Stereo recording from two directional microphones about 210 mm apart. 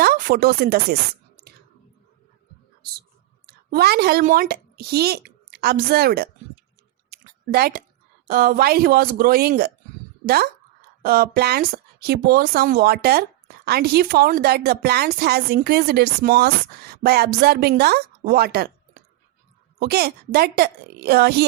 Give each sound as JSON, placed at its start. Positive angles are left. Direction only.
{"t": 0.0, "sound": "speech", "side_deg": -45}
{"t": 3.4, "sound": "a woman's voice", "side_deg": -50}
{"t": 7.1, "sound": "a sound", "side_deg": -45}
{"t": 8.3, "sound": "speech", "side_deg": -45}
{"t": 19.8, "sound": "speech", "side_deg": -50}